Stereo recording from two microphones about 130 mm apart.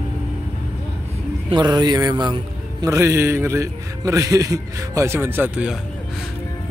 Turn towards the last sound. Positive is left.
turn(degrees=-10)  # may be behind; listen again after turning